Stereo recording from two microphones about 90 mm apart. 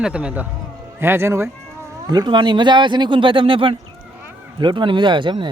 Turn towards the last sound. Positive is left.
turn(degrees=-60)  # may be behind; listen again after turning